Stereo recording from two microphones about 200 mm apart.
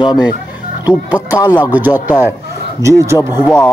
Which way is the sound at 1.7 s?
10° right (ahead or behind).